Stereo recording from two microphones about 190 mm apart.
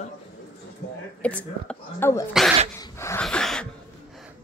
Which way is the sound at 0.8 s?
65° left (ahead or behind).